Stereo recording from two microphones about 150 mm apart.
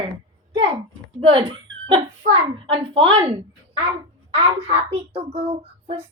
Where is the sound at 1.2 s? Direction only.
35° right (ahead or behind).